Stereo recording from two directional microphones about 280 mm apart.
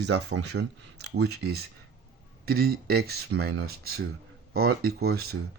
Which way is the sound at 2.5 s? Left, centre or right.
Right.